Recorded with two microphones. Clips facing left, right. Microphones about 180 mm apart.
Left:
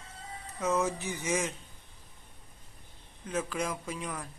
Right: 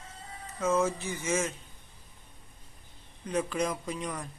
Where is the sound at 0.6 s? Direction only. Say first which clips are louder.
Right 2 dB; 15° left (ahead or behind).